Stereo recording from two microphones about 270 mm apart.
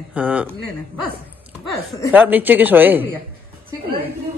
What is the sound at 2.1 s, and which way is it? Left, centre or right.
Speech, centre.